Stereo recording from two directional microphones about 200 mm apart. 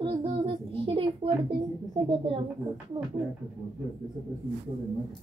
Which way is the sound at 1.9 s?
30° right (ahead or behind).